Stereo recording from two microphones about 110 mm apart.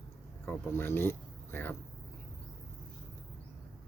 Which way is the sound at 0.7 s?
20° left (ahead or behind).